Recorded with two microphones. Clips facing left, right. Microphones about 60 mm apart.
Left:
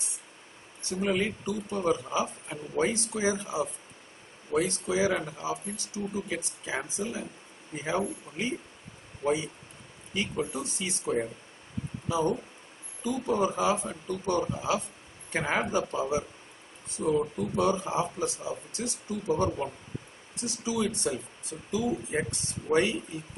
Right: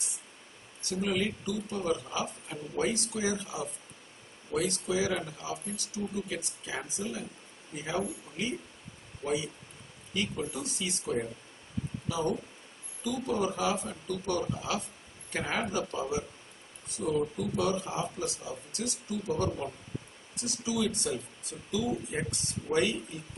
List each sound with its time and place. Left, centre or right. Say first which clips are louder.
0.8 s speech: left 2 dB; left